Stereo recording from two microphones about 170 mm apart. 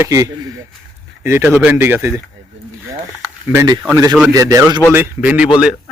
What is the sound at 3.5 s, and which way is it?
A man's voice, 15° right (ahead or behind).